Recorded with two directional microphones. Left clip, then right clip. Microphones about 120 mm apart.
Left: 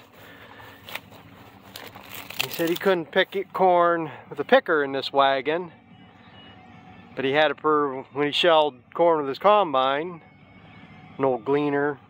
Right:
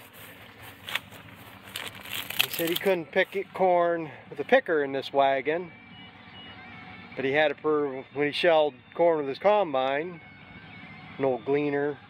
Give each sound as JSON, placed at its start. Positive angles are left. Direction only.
{"t": 1.7, "sound": "a sound", "side_deg": 30}
{"t": 2.1, "sound": "crumpling", "side_deg": 0}
{"t": 2.8, "sound": "speech", "side_deg": 75}
{"t": 4.6, "sound": "speech", "side_deg": 30}
{"t": 7.2, "sound": "speech", "side_deg": 50}
{"t": 8.2, "sound": "speech", "side_deg": 35}
{"t": 11.3, "sound": "speech", "side_deg": 65}